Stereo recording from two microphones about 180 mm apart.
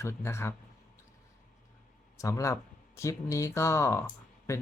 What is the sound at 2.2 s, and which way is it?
Speech, 15° left (ahead or behind).